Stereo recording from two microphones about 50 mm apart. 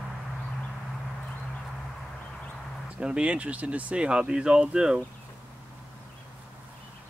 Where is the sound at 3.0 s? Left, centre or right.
Right.